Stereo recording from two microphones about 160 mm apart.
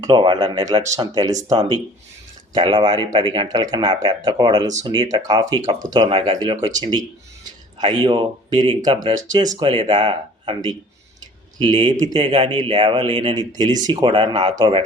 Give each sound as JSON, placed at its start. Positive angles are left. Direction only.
{"t": 0.0, "sound": "speech", "side_deg": -30}